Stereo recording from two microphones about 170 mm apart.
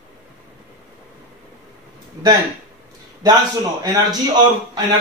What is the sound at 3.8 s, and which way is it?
A man's voice, 20° right (ahead or behind).